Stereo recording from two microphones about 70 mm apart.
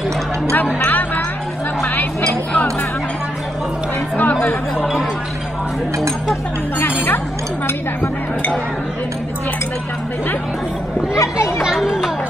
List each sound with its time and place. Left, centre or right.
0.8 s music: left
4.7 s speech: centre
11.1 s a child's voice: left
11.6 s a sound: centre